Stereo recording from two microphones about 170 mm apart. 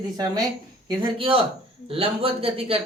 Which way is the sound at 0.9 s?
30° right (ahead or behind).